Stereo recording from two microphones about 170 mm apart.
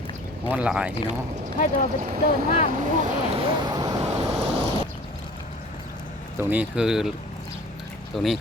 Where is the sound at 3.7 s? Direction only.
20° right (ahead or behind).